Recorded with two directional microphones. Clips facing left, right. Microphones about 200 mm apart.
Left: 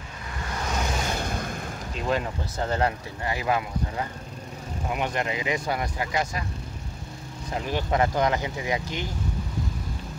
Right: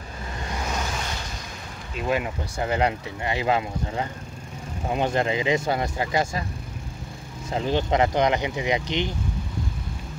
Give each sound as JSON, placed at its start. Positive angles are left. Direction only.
{"t": 1.2, "sound": "a sound", "side_deg": 55}
{"t": 2.0, "sound": "speech", "side_deg": -10}
{"t": 7.5, "sound": "speech", "side_deg": -25}